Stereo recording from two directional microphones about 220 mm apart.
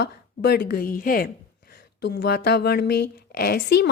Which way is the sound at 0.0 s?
45° left (ahead or behind).